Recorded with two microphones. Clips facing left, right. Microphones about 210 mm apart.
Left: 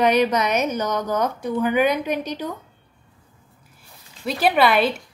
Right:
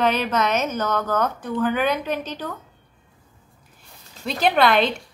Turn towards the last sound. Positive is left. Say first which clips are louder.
# even
turn(degrees=5)  # may be behind; listen again after turning